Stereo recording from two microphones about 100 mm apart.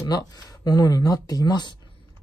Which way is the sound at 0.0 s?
40° left (ahead or behind).